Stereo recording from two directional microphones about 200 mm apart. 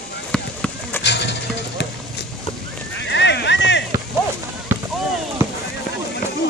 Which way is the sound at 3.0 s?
60° left (ahead or behind).